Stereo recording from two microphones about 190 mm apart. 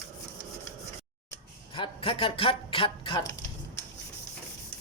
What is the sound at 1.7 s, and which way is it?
Speech, 25° left (ahead or behind).